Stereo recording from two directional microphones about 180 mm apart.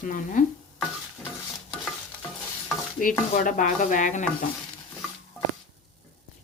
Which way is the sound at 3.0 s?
50° left (ahead or behind).